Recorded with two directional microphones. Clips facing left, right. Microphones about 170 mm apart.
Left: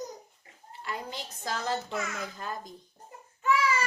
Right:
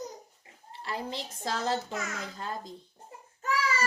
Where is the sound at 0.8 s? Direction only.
30° right (ahead or behind).